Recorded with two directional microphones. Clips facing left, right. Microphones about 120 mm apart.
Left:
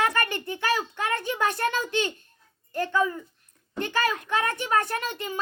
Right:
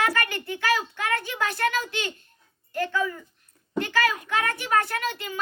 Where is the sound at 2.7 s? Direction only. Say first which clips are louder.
Left 2 dB; 20° left (ahead or behind).